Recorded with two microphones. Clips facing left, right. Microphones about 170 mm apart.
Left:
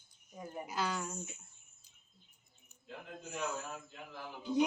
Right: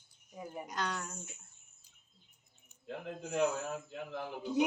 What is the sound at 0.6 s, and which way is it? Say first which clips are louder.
Speech: left 2 dB; 5° left (ahead or behind).